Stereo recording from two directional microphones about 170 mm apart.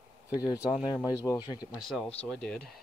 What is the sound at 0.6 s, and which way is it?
Speech, 5° right (ahead or behind).